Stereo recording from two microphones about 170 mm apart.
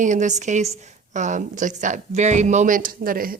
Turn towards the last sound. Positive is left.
turn(degrees=-60)  # may be behind; listen again after turning